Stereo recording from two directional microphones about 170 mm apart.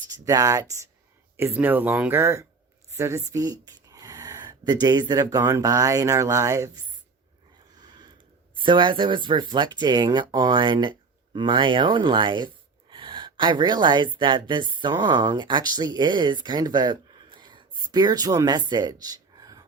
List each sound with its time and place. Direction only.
0.3 s speech: 20° right (ahead or behind)
7.8 s a sound: 25° right (ahead or behind)
8.6 s speech: 30° right (ahead or behind)
12.9 s gasp: 30° right (ahead or behind)
14.2 s speech: 25° right (ahead or behind)